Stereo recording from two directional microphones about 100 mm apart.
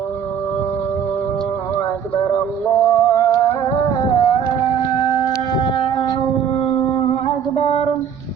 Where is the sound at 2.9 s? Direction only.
35° left (ahead or behind).